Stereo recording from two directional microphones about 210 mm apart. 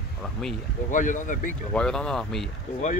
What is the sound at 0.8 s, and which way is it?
Speech, 40° left (ahead or behind).